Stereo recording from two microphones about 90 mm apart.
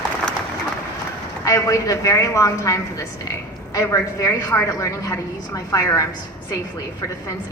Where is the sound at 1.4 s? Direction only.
35° left (ahead or behind).